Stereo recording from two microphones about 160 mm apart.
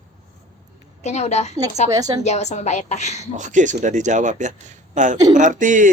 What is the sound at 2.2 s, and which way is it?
A woman's voice, 45° left (ahead or behind).